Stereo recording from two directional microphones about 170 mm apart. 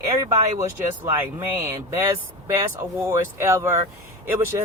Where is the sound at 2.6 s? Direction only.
20° right (ahead or behind).